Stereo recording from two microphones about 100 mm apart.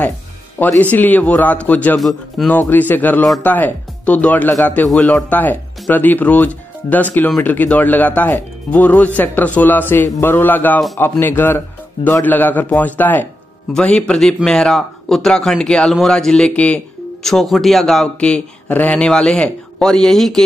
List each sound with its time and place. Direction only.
0.6 s speech: 20° left (ahead or behind)
2.0 s speech: centre (ahead or behind)
2.5 s a man's voice: 20° left (ahead or behind)
17.2 s speech: centre (ahead or behind)